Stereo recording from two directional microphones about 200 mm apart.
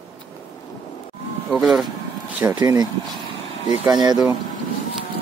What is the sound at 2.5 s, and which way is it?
Speech, 20° right (ahead or behind).